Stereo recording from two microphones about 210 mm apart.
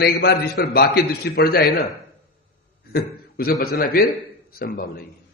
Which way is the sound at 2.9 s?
45° left (ahead or behind).